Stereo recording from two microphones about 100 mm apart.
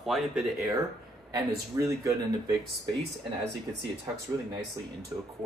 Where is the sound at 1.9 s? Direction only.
35° right (ahead or behind).